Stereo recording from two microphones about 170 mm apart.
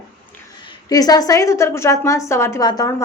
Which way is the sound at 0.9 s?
20° left (ahead or behind).